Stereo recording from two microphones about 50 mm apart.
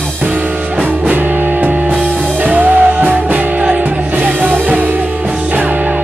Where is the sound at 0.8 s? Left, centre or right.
Right.